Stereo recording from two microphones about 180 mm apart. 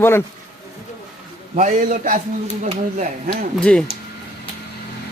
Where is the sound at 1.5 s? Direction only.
45° right (ahead or behind).